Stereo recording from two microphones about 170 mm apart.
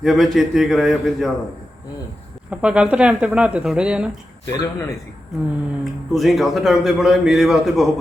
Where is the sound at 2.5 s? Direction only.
5° right (ahead or behind).